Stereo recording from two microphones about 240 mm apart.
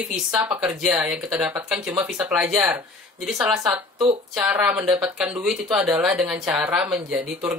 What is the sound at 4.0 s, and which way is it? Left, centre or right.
Speech, centre.